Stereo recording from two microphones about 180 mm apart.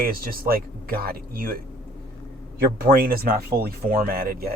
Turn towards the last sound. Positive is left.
turn(degrees=-55)  # may be behind; listen again after turning